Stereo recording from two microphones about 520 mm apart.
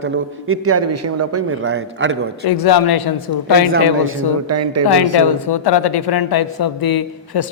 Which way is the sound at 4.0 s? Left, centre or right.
Right.